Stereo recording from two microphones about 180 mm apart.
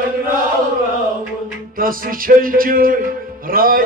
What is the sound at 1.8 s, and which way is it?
Music, 50° right (ahead or behind).